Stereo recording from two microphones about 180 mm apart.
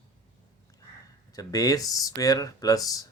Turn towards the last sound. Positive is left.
turn(degrees=20)  # may be behind; listen again after turning